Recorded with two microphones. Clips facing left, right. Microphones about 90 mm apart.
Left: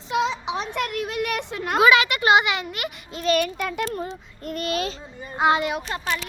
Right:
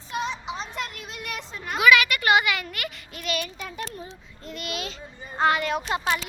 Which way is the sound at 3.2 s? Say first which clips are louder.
Left 9 dB; 50° left (ahead or behind).